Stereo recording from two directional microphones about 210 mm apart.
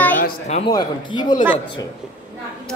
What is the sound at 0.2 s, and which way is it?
Speech, 30° left (ahead or behind).